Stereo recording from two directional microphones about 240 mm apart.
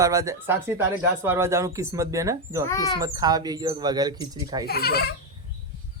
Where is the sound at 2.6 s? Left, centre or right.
Centre.